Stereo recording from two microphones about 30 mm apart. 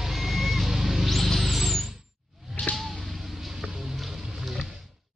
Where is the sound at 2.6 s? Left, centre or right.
Left.